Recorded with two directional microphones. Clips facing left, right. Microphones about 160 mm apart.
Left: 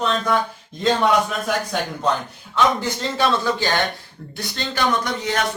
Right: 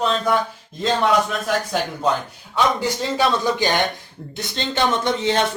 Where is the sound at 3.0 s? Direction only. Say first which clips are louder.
Even; 15° right (ahead or behind).